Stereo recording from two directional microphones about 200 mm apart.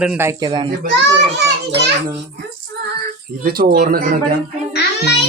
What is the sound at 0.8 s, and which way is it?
Speech, 60° right (ahead or behind).